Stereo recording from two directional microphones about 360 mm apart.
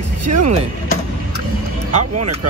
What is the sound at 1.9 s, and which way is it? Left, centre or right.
Speech, right.